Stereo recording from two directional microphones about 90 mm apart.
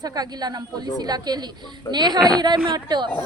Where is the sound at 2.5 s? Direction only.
75° right (ahead or behind).